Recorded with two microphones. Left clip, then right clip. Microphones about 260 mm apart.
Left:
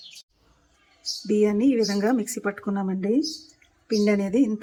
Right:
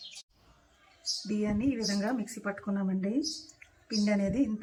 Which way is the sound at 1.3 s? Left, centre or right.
Left.